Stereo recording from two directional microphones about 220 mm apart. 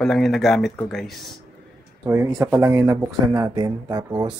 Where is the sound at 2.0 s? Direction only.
15° right (ahead or behind).